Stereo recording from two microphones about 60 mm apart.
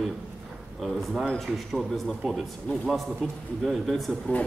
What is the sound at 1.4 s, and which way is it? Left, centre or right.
A man's voice, centre.